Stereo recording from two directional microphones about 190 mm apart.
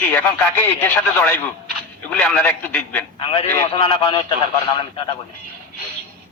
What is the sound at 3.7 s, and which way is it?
Speech, 30° left (ahead or behind).